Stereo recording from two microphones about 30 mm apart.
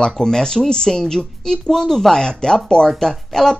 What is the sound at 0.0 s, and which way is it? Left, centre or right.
Speech, left.